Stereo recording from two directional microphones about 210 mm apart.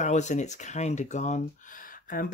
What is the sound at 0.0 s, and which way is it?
Speech, 35° left (ahead or behind).